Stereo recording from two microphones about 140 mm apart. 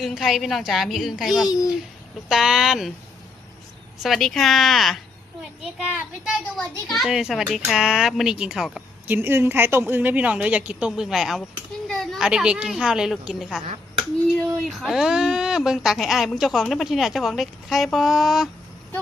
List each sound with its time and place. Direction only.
0.0 s speech: centre (ahead or behind)
1.5 s a child's voice: 25° left (ahead or behind)
2.3 s speech: 5° right (ahead or behind)
4.0 s speech: centre (ahead or behind)
9.0 s a woman's voice: 15° right (ahead or behind)